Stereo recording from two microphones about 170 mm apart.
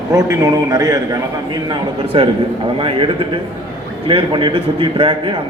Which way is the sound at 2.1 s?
30° right (ahead or behind).